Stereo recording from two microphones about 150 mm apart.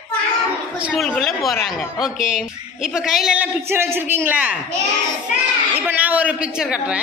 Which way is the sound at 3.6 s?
15° right (ahead or behind).